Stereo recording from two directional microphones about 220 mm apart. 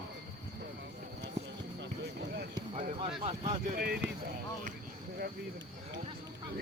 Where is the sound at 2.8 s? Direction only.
30° right (ahead or behind); by 4.0 s 45° right (ahead or behind).